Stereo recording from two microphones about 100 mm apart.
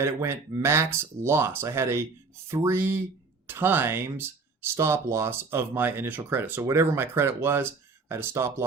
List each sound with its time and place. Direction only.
0.0 s speech: 30° right (ahead or behind)